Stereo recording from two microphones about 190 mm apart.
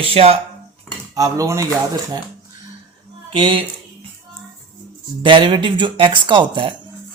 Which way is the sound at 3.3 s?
25° right (ahead or behind).